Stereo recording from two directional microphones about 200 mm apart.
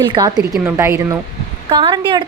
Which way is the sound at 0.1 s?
20° right (ahead or behind).